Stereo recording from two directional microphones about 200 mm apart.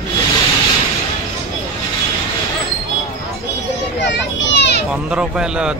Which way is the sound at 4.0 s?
60° left (ahead or behind).